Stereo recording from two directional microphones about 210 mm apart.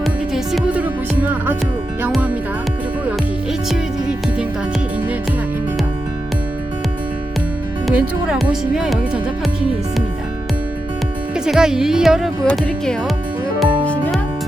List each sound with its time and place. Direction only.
0.0 s music: centre (ahead or behind)
3.7 s music: 5° right (ahead or behind)
7.9 s speech: centre (ahead or behind)
11.3 s speech: 5° right (ahead or behind)
13.6 s music: 5° left (ahead or behind)